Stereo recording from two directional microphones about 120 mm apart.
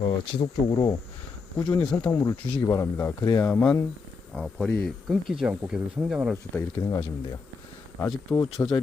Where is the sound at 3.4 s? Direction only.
10° left (ahead or behind); by 6.3 s 10° right (ahead or behind).